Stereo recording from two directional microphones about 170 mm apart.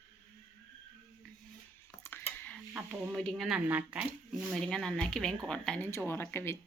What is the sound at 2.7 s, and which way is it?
Speech, 5° right (ahead or behind).